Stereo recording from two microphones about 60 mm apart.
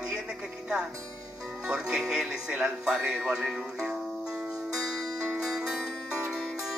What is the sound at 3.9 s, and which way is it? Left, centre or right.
Music, centre.